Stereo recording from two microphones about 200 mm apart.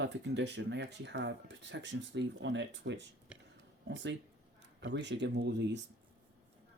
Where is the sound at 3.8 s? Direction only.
60° right (ahead or behind).